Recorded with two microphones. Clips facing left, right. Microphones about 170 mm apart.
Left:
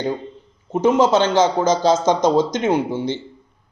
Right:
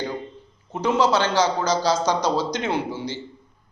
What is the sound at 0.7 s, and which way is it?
A man's voice, 20° left (ahead or behind).